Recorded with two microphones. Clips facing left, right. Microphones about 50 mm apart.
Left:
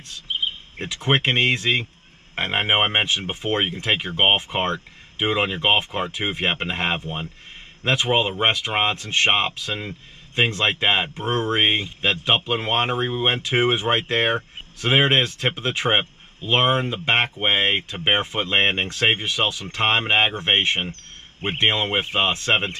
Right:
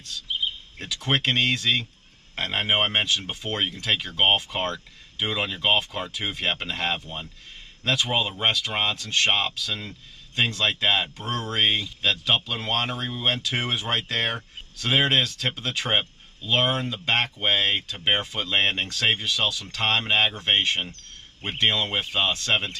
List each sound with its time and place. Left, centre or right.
0.0 s speech: left